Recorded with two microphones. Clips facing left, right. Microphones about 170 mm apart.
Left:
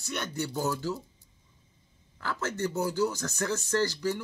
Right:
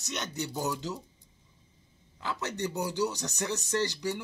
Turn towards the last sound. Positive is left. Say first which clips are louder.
# left 2 dB
turn(degrees=-15)  # may be behind; listen again after turning